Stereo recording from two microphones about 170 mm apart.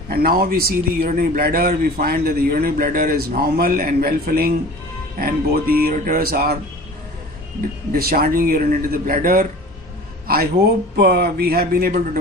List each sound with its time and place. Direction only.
0.1 s speech: 60° right (ahead or behind)
7.9 s a man's voice: 60° right (ahead or behind)